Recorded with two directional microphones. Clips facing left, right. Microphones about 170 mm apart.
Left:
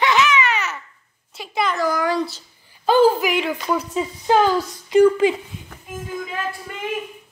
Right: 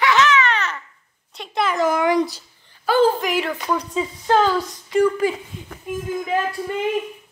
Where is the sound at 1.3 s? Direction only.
Centre (ahead or behind).